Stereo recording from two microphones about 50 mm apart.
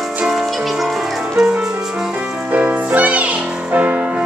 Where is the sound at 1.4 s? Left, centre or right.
Centre.